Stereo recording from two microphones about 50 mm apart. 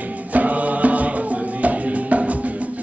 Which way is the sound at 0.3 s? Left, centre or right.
Right.